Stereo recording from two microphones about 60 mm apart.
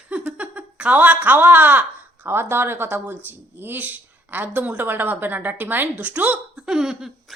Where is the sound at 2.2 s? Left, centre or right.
Right.